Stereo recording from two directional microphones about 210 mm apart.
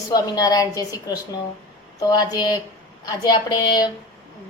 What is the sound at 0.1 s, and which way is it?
A woman's voice, 15° left (ahead or behind).